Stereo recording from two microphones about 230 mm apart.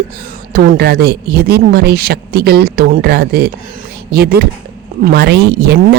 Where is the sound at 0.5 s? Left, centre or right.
Right.